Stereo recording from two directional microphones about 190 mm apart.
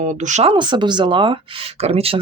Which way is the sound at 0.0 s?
40° right (ahead or behind).